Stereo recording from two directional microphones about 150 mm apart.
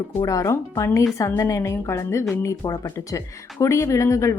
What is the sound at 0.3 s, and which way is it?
Speech, 20° left (ahead or behind).